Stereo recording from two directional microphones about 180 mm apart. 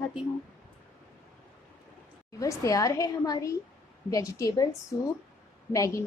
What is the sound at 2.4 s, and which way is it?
A woman's voice, 15° left (ahead or behind).